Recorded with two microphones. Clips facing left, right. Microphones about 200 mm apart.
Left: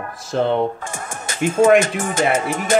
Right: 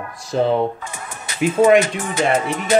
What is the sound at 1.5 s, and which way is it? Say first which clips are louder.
Speech: even; 45° left (ahead or behind).